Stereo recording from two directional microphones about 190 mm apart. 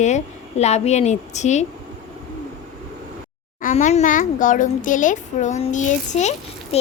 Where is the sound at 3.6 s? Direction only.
40° left (ahead or behind).